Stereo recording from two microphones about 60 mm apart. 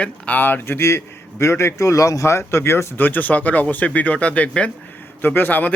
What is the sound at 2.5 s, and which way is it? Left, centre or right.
Speech, left.